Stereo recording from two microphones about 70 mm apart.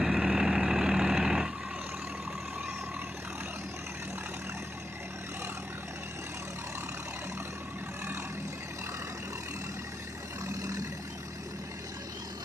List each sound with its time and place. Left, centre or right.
0.0 s vehicle: centre
10.6 s vehicle: right